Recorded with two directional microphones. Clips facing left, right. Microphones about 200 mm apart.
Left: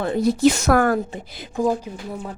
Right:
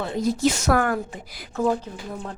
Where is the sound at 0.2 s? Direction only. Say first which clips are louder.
Left 5 dB; 65° left (ahead or behind).